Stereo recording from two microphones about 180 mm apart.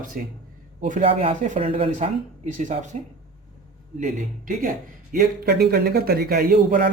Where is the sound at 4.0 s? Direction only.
45° right (ahead or behind).